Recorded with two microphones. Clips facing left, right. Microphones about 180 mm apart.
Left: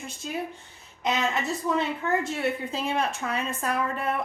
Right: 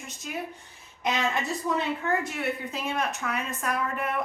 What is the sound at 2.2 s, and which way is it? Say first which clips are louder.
A woman's voice: left 3 dB; 30° left (ahead or behind).